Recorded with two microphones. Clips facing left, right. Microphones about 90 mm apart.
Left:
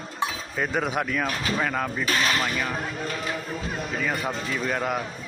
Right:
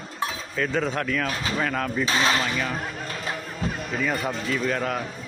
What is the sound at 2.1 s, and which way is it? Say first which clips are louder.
Speech: right 2 dB; 25° right (ahead or behind).